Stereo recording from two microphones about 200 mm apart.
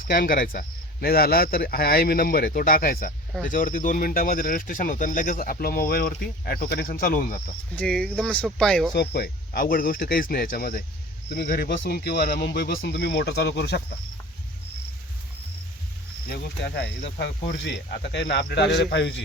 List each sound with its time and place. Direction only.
0.1 s speech: 45° left (ahead or behind)
7.8 s speech: 5° left (ahead or behind)
9.0 s speech: 50° left (ahead or behind)
16.3 s speech: 55° left (ahead or behind)